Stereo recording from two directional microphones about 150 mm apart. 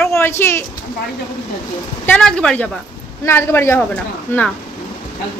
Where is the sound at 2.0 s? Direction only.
10° left (ahead or behind).